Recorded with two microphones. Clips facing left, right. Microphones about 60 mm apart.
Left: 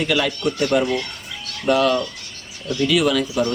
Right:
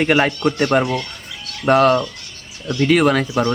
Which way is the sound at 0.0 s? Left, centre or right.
Right.